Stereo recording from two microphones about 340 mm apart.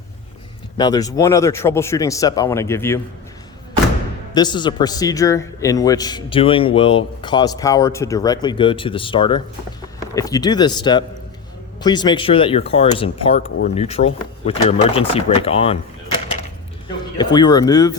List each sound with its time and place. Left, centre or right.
0.8 s a man's voice: centre
4.4 s a man's voice: centre
17.2 s a man's voice: centre